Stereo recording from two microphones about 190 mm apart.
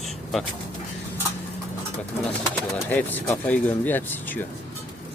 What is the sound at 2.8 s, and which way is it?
Speech, 10° left (ahead or behind).